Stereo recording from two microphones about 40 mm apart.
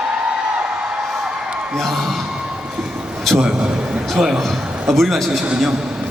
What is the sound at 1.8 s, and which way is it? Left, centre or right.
Speech, centre.